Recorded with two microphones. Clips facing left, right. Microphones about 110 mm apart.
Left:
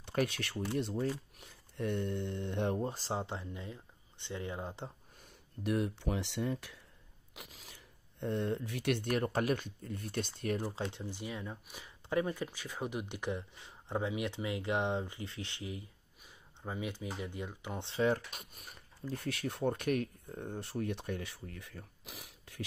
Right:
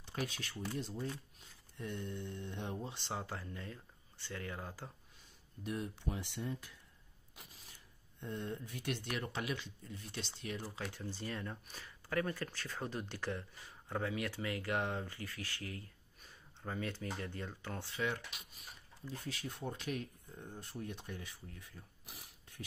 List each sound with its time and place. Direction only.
0.0 s speech: 60° left (ahead or behind)
2.9 s speech: 35° left (ahead or behind)
5.6 s speech: 75° left (ahead or behind)
7.3 s speech: 90° left; by 9.0 s 70° left (ahead or behind)
9.0 s speech: 45° left (ahead or behind)
10.8 s speech: 20° left (ahead or behind)
18.0 s speech: 35° left (ahead or behind)
18.4 s speech: 55° left (ahead or behind); by 22.6 s 90° left